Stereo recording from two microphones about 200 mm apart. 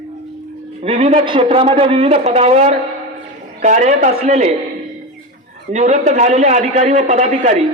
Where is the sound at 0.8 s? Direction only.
30° right (ahead or behind).